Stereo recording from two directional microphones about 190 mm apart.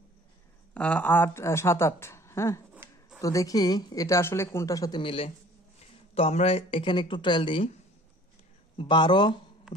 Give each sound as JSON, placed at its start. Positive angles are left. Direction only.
{"t": 0.7, "sound": "a woman's voice", "side_deg": 5}
{"t": 2.7, "sound": "a sound", "side_deg": -5}
{"t": 3.2, "sound": "a woman's voice", "side_deg": 15}
{"t": 8.7, "sound": "speech", "side_deg": 25}